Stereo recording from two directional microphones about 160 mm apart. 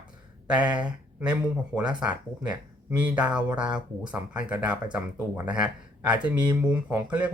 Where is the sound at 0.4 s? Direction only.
10° right (ahead or behind).